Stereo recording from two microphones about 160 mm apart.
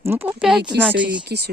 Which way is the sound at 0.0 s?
15° right (ahead or behind).